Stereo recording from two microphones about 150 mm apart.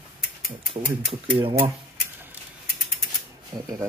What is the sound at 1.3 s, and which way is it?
Speech, 35° right (ahead or behind).